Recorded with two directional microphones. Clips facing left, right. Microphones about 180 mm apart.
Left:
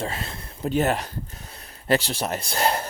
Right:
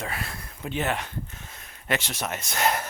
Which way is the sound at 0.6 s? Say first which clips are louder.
Left 6 dB; 40° left (ahead or behind).